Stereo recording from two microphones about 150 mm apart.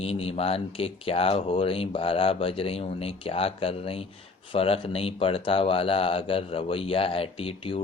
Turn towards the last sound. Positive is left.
turn(degrees=35)  # may be behind; listen again after turning